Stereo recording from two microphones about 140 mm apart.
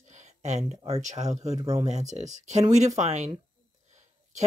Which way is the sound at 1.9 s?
55° right (ahead or behind).